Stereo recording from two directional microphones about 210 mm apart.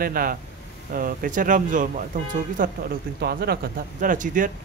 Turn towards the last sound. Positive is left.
turn(degrees=-40)  # may be behind; listen again after turning